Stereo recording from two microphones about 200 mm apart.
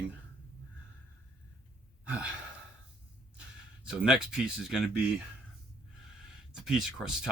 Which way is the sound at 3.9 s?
5° right (ahead or behind).